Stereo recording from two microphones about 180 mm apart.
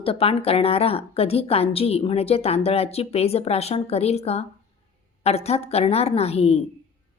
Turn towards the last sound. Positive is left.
turn(degrees=35)  # may be behind; listen again after turning